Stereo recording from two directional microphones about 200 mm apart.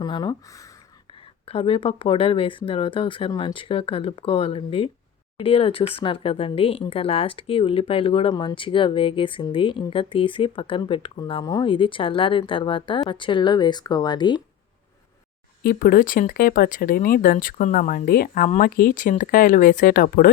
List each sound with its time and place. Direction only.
0.0 s speech: 20° left (ahead or behind)
15.6 s speech: 45° left (ahead or behind)